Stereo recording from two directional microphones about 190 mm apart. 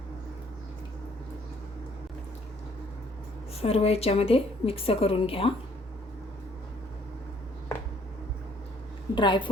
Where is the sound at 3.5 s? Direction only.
30° left (ahead or behind).